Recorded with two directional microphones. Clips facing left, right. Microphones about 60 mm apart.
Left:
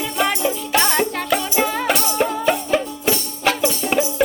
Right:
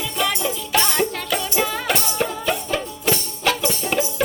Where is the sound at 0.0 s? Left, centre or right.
Left.